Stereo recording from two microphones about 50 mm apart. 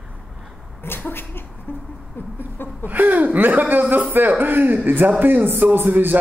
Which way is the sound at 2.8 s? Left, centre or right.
Right.